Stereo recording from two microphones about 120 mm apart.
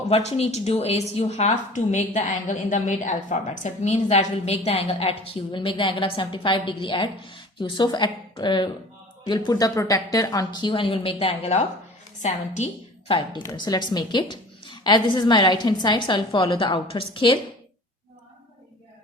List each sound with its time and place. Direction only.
0.1 s a woman's voice: 65° left (ahead or behind)
13.1 s a woman's voice: 40° left (ahead or behind)